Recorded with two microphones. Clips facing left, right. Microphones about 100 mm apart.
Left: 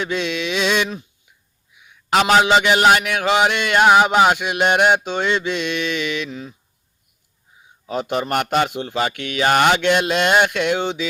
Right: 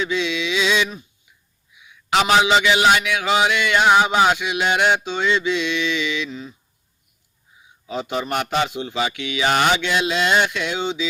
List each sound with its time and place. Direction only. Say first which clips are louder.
0.0 s a man's voice: even; 50° left (ahead or behind)
7.9 s a man's voice: left 3 dB; 50° left (ahead or behind)